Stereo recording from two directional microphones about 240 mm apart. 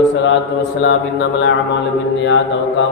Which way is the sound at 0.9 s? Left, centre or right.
Left.